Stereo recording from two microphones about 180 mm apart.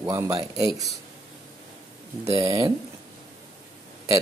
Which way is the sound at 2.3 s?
15° right (ahead or behind).